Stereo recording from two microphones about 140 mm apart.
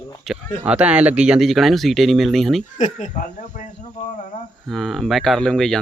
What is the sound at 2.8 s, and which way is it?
Speech, 60° left (ahead or behind).